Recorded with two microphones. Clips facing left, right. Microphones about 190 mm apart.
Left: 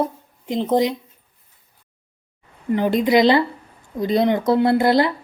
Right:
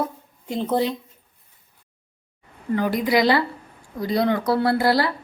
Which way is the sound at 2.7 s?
20° left (ahead or behind).